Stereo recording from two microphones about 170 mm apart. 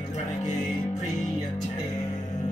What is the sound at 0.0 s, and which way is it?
Music, 40° left (ahead or behind).